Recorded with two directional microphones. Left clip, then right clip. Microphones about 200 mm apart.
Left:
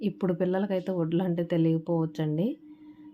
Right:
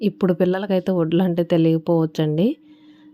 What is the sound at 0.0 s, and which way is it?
Speech, 35° right (ahead or behind).